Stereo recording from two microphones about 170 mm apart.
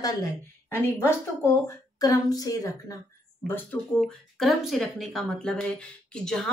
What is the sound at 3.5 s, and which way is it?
Speech, 10° left (ahead or behind).